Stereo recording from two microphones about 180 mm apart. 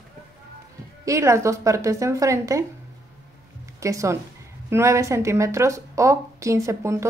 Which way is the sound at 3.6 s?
15° right (ahead or behind).